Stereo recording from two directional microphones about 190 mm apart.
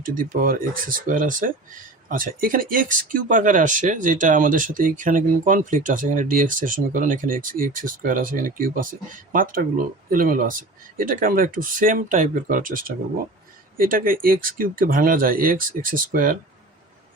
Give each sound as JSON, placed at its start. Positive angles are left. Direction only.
{"t": 0.0, "sound": "speech", "side_deg": -45}